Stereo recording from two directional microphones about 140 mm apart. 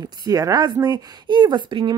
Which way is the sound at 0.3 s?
25° right (ahead or behind).